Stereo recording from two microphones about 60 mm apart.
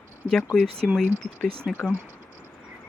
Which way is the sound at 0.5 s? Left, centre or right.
Centre.